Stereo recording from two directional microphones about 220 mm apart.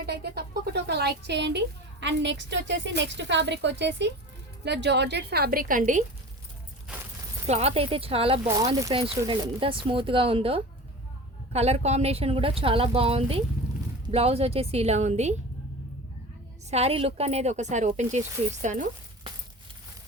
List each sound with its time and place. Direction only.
0.0 s a woman's voice: 45° right (ahead or behind)
6.8 s a sound: 10° right (ahead or behind)
7.4 s a woman's voice: 30° right (ahead or behind)
16.6 s speech: 30° right (ahead or behind)